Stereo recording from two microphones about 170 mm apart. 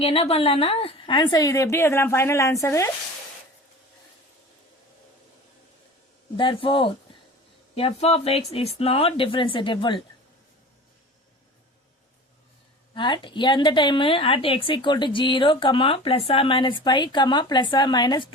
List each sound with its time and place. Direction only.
0.0 s a woman's voice: 35° left (ahead or behind)
6.3 s speech: 30° left (ahead or behind)
12.9 s a woman's voice: 30° left (ahead or behind)